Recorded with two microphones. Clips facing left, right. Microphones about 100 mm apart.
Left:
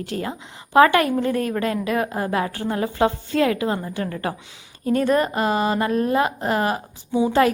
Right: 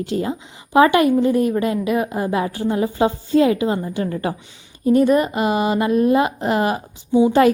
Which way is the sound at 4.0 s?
20° right (ahead or behind).